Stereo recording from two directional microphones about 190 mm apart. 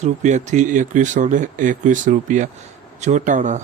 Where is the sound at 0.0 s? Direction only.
40° right (ahead or behind).